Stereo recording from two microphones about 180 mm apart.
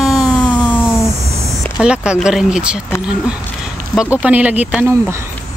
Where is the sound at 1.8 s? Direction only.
5° right (ahead or behind).